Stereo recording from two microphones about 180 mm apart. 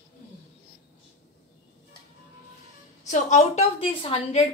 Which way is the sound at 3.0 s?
40° left (ahead or behind).